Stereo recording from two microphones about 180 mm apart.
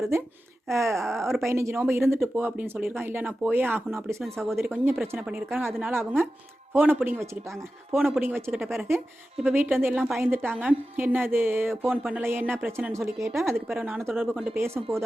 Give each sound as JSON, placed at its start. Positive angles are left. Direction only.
{"t": 0.1, "sound": "speech", "side_deg": -15}
{"t": 4.2, "sound": "speech", "side_deg": 0}
{"t": 4.5, "sound": "speech", "side_deg": -10}
{"t": 8.5, "sound": "speech", "side_deg": 0}
{"t": 13.7, "sound": "speech", "side_deg": 0}
{"t": 14.0, "sound": "speech", "side_deg": -10}